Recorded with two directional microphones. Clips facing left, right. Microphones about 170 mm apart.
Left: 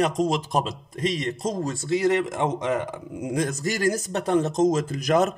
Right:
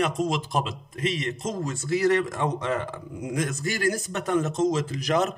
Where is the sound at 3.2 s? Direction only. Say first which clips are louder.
Left 3 dB; 30° left (ahead or behind); by 5.3 s 50° left (ahead or behind).